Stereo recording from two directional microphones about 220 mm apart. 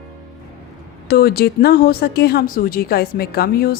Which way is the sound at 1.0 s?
45° left (ahead or behind).